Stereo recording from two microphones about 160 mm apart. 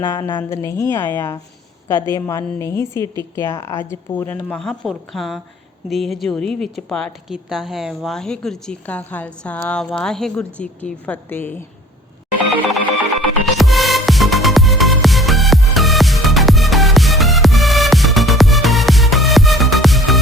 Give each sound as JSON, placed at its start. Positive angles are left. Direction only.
{"t": 0.0, "sound": "a woman's voice", "side_deg": 25}
{"t": 13.4, "sound": "music", "side_deg": 0}